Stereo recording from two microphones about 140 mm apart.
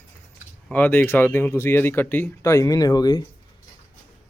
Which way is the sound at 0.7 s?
10° left (ahead or behind).